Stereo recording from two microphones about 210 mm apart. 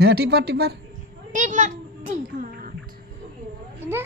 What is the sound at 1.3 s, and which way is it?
Speech, 35° right (ahead or behind).